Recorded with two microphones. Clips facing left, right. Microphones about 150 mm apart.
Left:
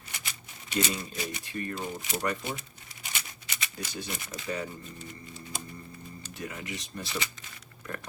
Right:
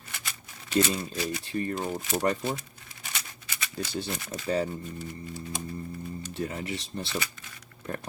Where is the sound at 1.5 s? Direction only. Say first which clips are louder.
Right 5 dB; 30° right (ahead or behind).